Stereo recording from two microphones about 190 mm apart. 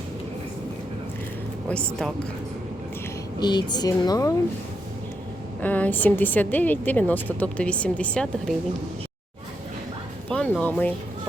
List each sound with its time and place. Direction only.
1.7 s speech: 5° left (ahead or behind)
3.4 s a woman's voice: 20° left (ahead or behind)
5.6 s a woman's voice: 10° left (ahead or behind)
10.2 s speech: 5° left (ahead or behind)